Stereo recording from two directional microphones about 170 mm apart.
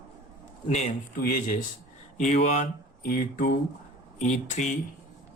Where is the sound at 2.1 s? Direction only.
45° left (ahead or behind).